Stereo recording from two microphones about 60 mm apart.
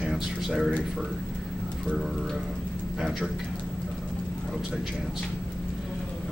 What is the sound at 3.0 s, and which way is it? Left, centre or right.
Speech, centre.